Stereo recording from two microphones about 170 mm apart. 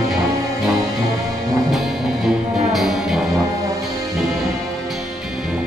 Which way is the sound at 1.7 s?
Centre (ahead or behind).